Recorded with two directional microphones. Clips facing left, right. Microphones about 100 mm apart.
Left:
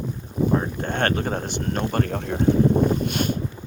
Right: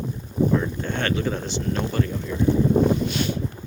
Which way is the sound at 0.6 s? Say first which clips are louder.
Left 2 dB; 50° left (ahead or behind).